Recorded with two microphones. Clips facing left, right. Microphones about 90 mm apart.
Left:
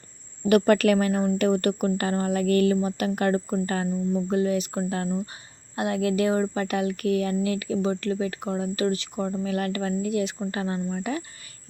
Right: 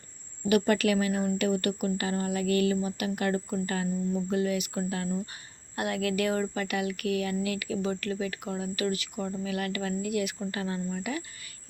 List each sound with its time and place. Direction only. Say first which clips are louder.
0.4 s speech: left 6 dB; 50° left (ahead or behind); by 11.2 s 35° left (ahead or behind)